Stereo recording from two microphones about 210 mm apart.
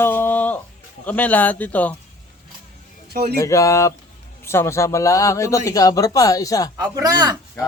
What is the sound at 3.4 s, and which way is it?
Speech, 15° left (ahead or behind).